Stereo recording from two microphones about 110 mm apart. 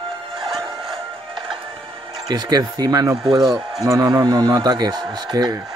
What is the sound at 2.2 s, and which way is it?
Speech, 40° right (ahead or behind).